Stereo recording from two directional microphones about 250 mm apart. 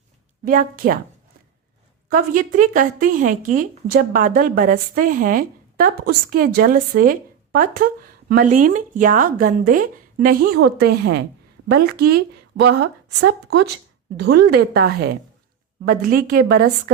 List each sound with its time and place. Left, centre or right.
0.4 s a woman's voice: right
2.0 s a woman's voice: right